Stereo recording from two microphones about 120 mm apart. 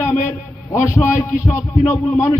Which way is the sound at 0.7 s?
20° left (ahead or behind).